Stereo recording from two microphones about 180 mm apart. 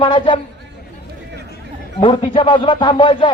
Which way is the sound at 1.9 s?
30° left (ahead or behind).